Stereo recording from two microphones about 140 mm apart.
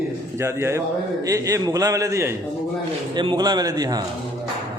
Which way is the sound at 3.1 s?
35° right (ahead or behind).